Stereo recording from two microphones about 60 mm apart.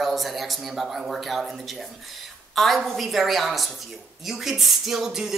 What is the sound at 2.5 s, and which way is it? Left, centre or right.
Speech, centre.